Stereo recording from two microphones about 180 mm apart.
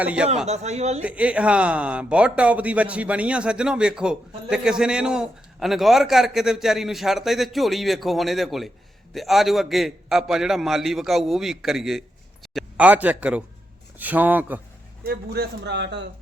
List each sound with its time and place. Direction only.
0.0 s a man's voice: 5° right (ahead or behind)
0.4 s a man's voice: 35° right (ahead or behind)
1.0 s a man's voice: 5° right (ahead or behind)
15.0 s a man's voice: 60° right (ahead or behind)